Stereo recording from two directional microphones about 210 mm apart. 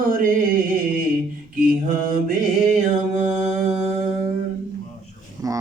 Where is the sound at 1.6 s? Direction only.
40° right (ahead or behind).